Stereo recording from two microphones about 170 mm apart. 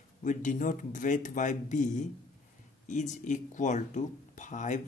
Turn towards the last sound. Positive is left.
turn(degrees=45)  # may be behind; listen again after turning